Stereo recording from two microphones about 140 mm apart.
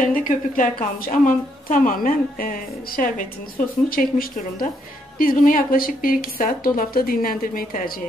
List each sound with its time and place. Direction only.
0.0 s a woman's voice: 75° left (ahead or behind)